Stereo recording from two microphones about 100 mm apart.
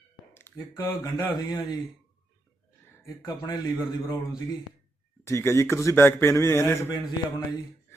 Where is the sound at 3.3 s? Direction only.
40° left (ahead or behind).